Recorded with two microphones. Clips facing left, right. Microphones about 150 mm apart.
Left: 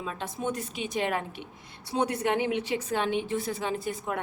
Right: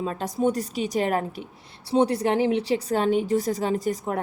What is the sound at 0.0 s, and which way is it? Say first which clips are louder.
Speech: right 8 dB; 40° right (ahead or behind).